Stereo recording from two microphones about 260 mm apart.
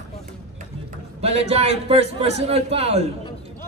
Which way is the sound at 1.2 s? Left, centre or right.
Right.